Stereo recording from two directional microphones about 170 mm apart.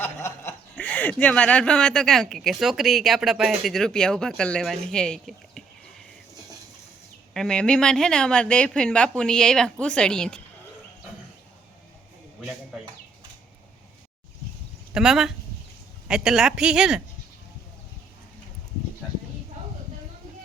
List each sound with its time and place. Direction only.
0.0 s speech: 15° left (ahead or behind)
7.3 s speech: 5° left (ahead or behind)
14.9 s speech: 5° right (ahead or behind)